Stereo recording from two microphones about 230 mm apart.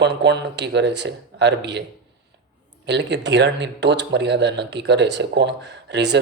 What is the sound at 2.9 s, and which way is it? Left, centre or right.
Speech, right.